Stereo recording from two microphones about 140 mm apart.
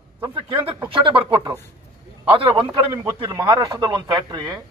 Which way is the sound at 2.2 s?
40° right (ahead or behind).